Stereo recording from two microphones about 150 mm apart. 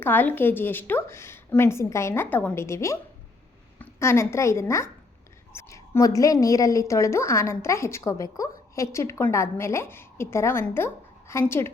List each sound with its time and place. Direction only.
0.0 s a woman's voice: 10° left (ahead or behind)